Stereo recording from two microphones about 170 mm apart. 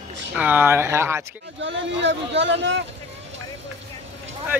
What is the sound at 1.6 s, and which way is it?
Speech, 90° right.